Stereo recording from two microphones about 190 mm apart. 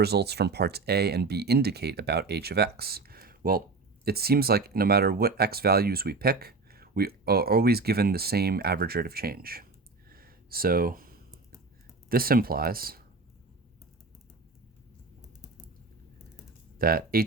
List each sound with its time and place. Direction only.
0.0 s speech: 60° right (ahead or behind)
10.1 s a sound: 50° right (ahead or behind)
12.0 s speech: 50° right (ahead or behind)
16.7 s speech: 50° right (ahead or behind)